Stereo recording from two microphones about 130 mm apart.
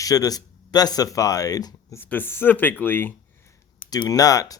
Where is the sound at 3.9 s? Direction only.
30° left (ahead or behind).